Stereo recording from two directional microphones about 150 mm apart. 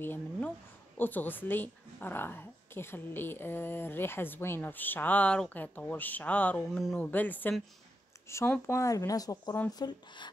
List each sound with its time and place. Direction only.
0.0 s a woman's voice: 15° left (ahead or behind); by 10.3 s 30° left (ahead or behind)